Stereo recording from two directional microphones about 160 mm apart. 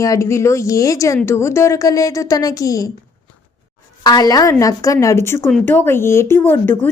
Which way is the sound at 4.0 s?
25° left (ahead or behind).